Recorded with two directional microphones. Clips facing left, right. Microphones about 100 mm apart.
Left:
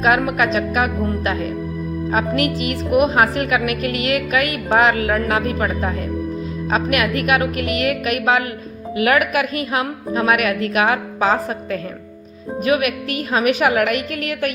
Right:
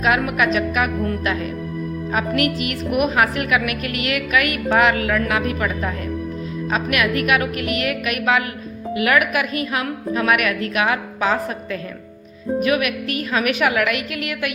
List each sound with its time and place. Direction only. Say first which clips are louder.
0.0 s a woman's voice: left 2 dB; 35° left (ahead or behind)